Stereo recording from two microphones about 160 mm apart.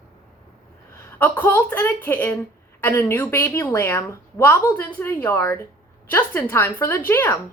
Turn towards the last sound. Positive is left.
turn(degrees=15)  # may be behind; listen again after turning